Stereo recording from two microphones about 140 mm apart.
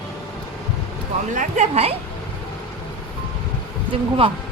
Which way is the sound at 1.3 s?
60° right (ahead or behind).